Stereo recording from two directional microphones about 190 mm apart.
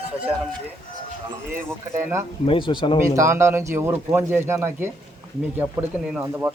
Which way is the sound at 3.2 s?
15° right (ahead or behind).